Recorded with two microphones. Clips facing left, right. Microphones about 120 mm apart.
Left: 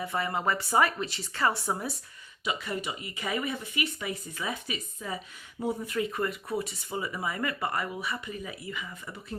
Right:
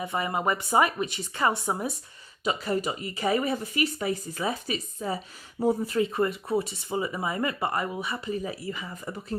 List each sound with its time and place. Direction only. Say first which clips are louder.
0.0 s speech: right 2 dB; 20° right (ahead or behind)
2.4 s speech: right 6 dB; 40° right (ahead or behind)